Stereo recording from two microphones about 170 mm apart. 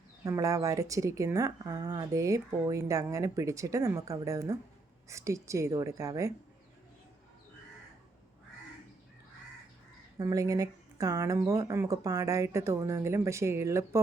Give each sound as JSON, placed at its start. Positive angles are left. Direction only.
{"t": 0.3, "sound": "speech", "side_deg": -20}
{"t": 10.2, "sound": "speech", "side_deg": -20}